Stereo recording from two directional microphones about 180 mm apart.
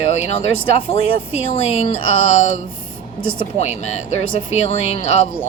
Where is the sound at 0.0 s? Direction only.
35° left (ahead or behind).